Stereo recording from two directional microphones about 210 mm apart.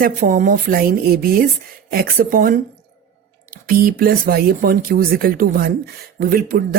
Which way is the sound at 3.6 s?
45° right (ahead or behind).